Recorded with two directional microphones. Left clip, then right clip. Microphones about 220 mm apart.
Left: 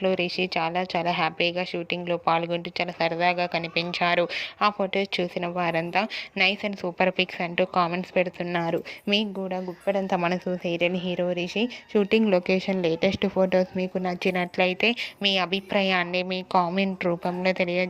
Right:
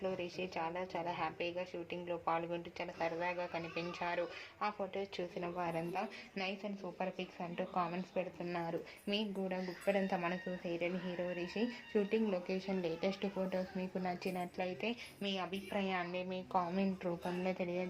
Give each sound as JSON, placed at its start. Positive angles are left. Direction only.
{"t": 0.0, "sound": "a woman's voice", "side_deg": 30}